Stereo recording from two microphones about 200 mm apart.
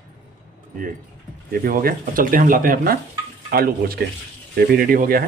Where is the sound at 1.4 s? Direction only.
45° right (ahead or behind).